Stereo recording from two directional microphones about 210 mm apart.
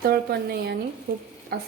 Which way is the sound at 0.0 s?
45° right (ahead or behind).